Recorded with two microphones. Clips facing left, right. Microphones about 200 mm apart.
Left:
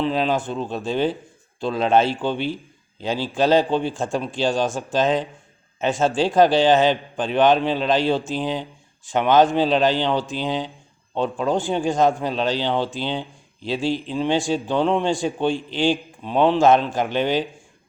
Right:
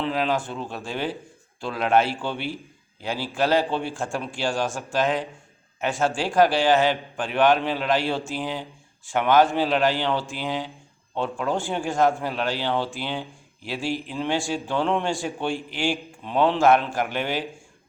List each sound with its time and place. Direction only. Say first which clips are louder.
0.0 s a man's voice: left 3 dB; 20° left (ahead or behind)